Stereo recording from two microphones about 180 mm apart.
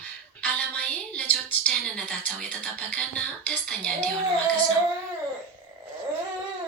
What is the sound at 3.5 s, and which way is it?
Speech, 5° left (ahead or behind).